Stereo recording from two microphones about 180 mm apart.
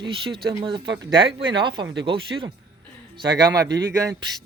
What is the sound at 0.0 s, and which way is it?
Speech, 30° right (ahead or behind).